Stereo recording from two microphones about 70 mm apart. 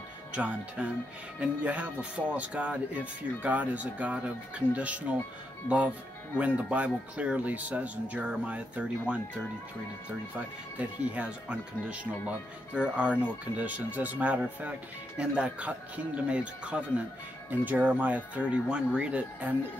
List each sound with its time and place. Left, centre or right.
0.3 s speech: centre